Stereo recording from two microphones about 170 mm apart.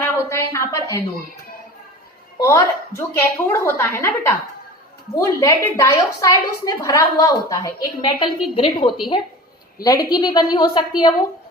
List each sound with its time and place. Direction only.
0.0 s a sound: 15° left (ahead or behind)
2.4 s a woman's voice: 15° left (ahead or behind)
8.5 s a woman's voice: 35° left (ahead or behind)